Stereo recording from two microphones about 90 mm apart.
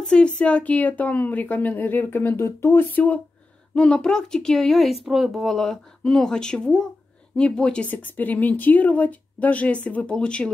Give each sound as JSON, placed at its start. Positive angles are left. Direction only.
{"t": 0.0, "sound": "speech", "side_deg": 10}